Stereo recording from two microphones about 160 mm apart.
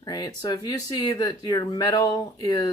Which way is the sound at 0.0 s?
25° left (ahead or behind).